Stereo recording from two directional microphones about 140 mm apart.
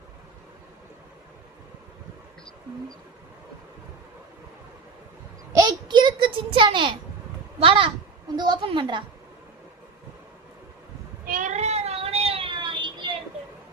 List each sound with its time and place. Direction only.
5.5 s a sound: 30° right (ahead or behind)
7.6 s a child's voice: 40° right (ahead or behind)
11.3 s cat: 65° right (ahead or behind); by 13.1 s 35° right (ahead or behind)